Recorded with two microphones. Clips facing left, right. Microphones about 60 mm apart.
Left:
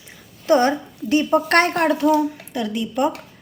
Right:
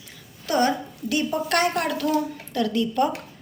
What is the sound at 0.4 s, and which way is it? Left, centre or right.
Speech, left.